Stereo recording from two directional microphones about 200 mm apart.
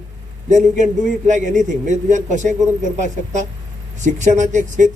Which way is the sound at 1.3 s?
40° right (ahead or behind).